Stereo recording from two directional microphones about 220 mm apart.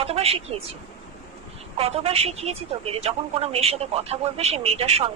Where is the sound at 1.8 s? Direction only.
25° right (ahead or behind).